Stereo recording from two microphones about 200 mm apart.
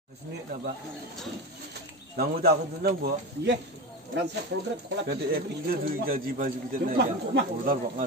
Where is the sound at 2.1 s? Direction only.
50° right (ahead or behind).